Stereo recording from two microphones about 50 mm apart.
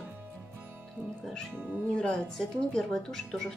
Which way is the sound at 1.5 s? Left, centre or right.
Right.